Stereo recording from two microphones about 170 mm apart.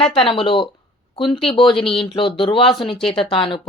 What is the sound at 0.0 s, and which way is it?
Speech, 30° left (ahead or behind).